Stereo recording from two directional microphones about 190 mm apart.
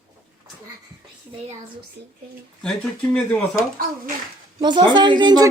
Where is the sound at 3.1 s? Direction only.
10° left (ahead or behind).